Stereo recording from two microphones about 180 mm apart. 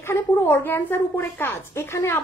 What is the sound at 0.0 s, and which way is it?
A woman's voice, 10° left (ahead or behind).